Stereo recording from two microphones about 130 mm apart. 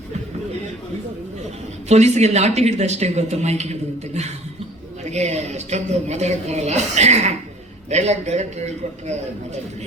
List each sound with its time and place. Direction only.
1.9 s a woman's voice: 60° right (ahead or behind)